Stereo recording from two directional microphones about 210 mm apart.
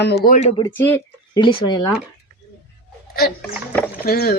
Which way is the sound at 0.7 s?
10° left (ahead or behind).